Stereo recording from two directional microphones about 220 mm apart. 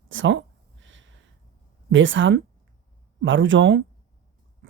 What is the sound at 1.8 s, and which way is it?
Speech, 60° right (ahead or behind).